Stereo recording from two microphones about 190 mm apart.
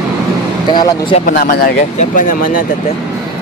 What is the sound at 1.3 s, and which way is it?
Speech, 55° left (ahead or behind).